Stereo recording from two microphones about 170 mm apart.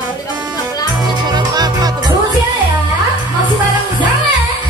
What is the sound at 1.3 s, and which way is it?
Music, 25° right (ahead or behind).